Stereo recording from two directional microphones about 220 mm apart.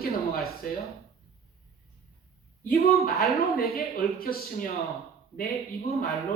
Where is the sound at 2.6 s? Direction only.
45° left (ahead or behind).